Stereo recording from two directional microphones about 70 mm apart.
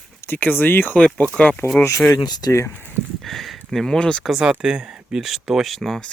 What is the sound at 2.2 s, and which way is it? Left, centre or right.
Speech, left.